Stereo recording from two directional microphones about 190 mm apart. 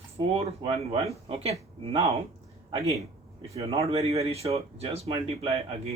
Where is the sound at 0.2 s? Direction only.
30° right (ahead or behind).